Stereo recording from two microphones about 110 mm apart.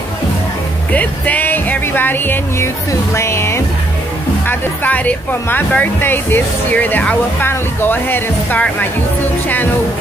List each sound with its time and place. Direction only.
0.9 s speech: 15° left (ahead or behind)
2.9 s music: 25° left (ahead or behind)
4.5 s speech: 15° left (ahead or behind)